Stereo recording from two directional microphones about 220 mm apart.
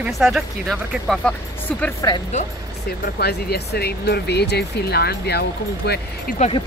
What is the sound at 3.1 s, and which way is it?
Speech, 45° left (ahead or behind).